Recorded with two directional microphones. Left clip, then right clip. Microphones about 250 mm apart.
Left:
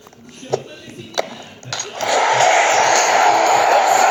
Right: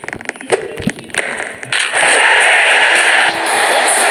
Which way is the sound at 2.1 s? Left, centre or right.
Right.